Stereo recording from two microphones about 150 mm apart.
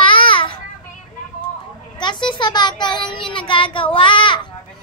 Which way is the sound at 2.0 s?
30° left (ahead or behind).